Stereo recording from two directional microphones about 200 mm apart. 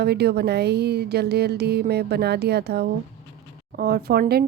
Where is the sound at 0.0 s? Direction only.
55° right (ahead or behind).